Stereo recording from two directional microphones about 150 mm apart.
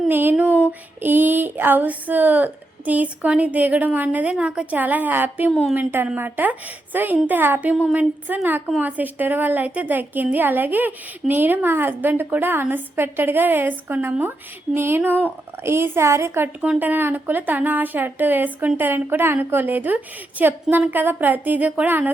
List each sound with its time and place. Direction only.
0.1 s a woman's voice: 15° right (ahead or behind)
5.5 s speech: 5° left (ahead or behind)
5.7 s a woman's voice: 15° right (ahead or behind)